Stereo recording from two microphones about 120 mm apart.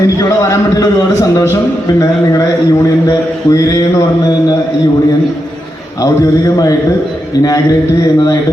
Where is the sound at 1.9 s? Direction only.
30° left (ahead or behind).